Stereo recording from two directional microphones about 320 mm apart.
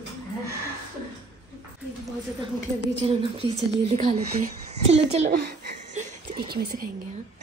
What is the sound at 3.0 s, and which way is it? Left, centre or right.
A woman's voice, centre.